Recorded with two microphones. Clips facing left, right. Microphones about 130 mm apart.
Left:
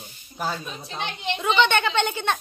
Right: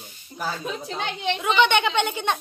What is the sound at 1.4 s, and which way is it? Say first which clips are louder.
Speech: even; 10° right (ahead or behind).